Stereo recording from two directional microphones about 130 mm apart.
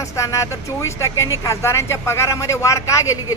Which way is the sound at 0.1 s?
20° left (ahead or behind).